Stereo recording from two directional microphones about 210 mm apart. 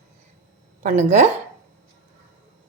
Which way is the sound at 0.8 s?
35° right (ahead or behind).